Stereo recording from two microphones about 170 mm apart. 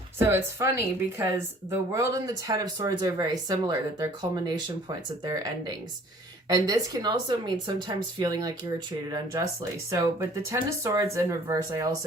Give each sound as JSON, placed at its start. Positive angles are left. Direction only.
{"t": 0.2, "sound": "speech", "side_deg": -15}